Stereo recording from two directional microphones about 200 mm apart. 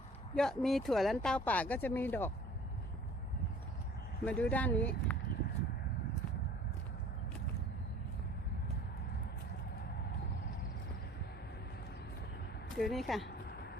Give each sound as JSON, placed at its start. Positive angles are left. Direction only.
{"t": 0.3, "sound": "speech", "side_deg": 0}
{"t": 4.3, "sound": "speech", "side_deg": 5}
{"t": 12.7, "sound": "speech", "side_deg": 0}